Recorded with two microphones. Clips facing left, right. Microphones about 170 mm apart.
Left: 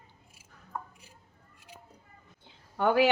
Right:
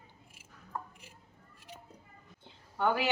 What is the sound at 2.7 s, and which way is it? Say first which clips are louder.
Speech: left 6 dB; 55° left (ahead or behind).